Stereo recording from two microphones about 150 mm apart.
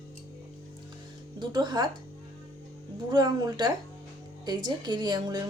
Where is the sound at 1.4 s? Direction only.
30° right (ahead or behind).